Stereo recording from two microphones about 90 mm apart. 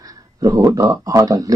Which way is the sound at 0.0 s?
40° right (ahead or behind).